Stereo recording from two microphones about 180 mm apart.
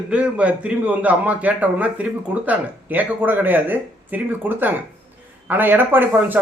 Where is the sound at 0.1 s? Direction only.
5° right (ahead or behind).